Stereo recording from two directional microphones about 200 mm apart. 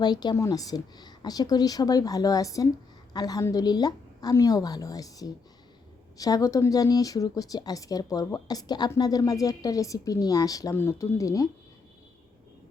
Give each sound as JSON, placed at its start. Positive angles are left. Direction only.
{"t": 0.0, "sound": "a woman's voice", "side_deg": 20}